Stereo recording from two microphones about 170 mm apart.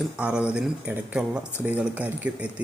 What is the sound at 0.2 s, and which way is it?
Speech, 5° right (ahead or behind).